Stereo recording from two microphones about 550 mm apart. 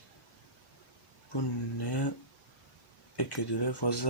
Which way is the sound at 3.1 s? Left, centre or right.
Left.